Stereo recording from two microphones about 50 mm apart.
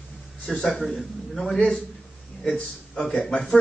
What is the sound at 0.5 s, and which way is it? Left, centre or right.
A man's voice, centre.